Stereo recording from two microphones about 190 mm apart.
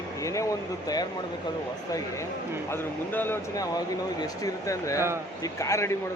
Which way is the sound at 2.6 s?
10° left (ahead or behind).